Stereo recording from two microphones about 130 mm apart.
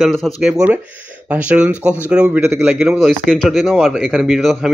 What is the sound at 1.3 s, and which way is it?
Speech, 10° right (ahead or behind).